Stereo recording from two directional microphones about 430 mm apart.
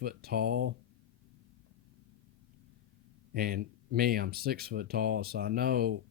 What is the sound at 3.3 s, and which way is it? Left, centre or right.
Speech, right.